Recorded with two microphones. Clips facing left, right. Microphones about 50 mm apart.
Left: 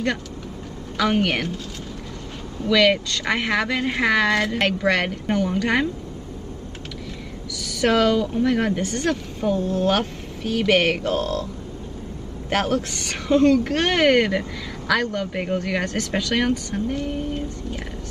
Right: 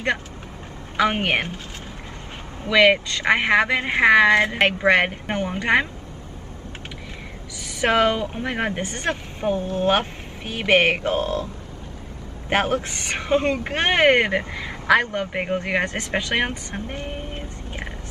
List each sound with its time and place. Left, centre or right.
0.9 s a woman's voice: right
2.6 s speech: right
7.5 s speech: right
12.4 s speech: right